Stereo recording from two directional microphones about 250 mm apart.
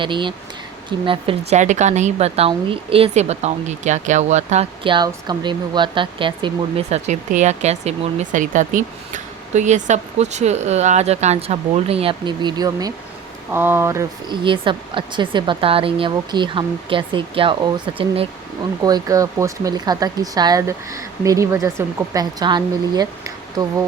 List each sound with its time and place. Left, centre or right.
0.0 s speech: centre